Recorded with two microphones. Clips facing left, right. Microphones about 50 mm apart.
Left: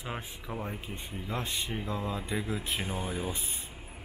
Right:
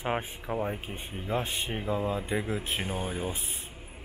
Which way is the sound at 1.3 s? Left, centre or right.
Centre.